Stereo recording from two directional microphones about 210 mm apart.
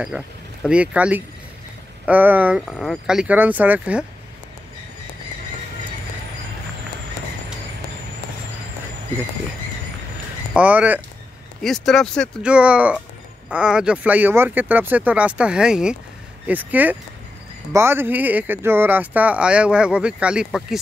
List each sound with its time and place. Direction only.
0.7 s speech: 5° right (ahead or behind)
10.5 s speech: 5° right (ahead or behind)